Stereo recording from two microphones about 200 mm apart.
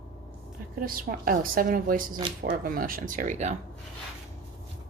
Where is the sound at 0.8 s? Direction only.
45° right (ahead or behind).